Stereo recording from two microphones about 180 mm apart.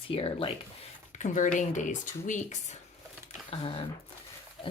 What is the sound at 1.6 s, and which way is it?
Speech, 45° left (ahead or behind).